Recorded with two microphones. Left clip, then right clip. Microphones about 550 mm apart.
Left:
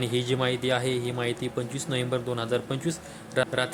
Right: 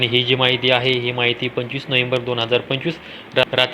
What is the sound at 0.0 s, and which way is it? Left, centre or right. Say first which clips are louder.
Speech: right 11 dB; left.